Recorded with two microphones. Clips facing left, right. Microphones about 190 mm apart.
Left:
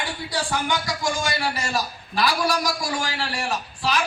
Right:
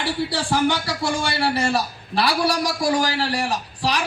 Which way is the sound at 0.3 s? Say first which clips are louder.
Right 2 dB; 30° right (ahead or behind).